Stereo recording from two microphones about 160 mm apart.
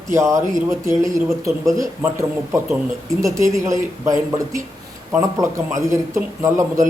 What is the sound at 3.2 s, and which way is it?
A man's voice, 20° right (ahead or behind).